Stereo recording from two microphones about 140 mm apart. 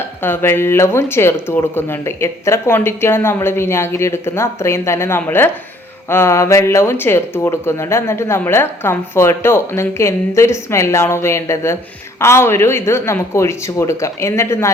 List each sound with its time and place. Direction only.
0.2 s speech: 15° left (ahead or behind)